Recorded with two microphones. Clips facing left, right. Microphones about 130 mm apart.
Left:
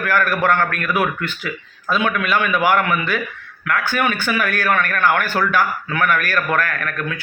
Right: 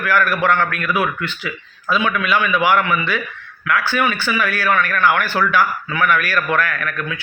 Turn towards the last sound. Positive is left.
turn(degrees=45)  # may be behind; listen again after turning